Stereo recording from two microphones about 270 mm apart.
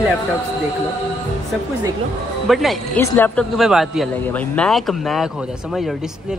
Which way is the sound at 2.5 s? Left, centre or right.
Centre.